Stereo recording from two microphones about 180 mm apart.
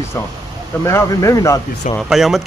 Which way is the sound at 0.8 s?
20° left (ahead or behind).